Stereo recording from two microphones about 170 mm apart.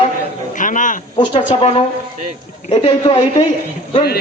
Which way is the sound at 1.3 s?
35° left (ahead or behind).